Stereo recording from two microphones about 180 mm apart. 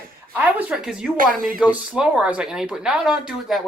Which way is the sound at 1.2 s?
50° right (ahead or behind).